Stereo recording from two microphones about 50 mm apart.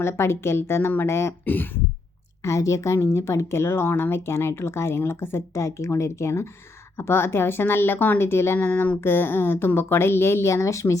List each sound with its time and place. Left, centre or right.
0.0 s a woman's voice: left
1.5 s speech: left
2.4 s a woman's voice: left
6.9 s a woman's voice: left
8.5 s speech: left
9.0 s a woman's voice: left